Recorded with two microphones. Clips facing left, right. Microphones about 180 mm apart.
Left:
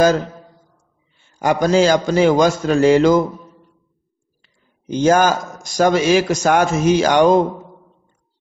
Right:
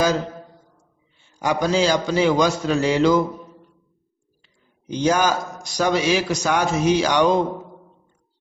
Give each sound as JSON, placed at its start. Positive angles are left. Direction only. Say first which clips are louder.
{"t": 1.4, "sound": "a man's voice", "louder": "left 5 dB", "side_deg": 50}
{"t": 4.4, "sound": "a man's voice", "louder": "even", "side_deg": 50}